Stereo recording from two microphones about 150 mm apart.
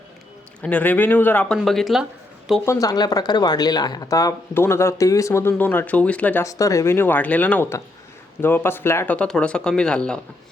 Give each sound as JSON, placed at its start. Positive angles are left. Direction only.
{"t": 0.6, "sound": "speech", "side_deg": 10}
{"t": 1.5, "sound": "speech", "side_deg": 0}
{"t": 2.6, "sound": "speech", "side_deg": 25}
{"t": 6.4, "sound": "speech", "side_deg": 20}